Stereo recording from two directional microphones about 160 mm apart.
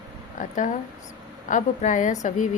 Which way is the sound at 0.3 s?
55° left (ahead or behind).